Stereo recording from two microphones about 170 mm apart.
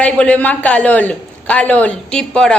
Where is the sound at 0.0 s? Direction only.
10° left (ahead or behind).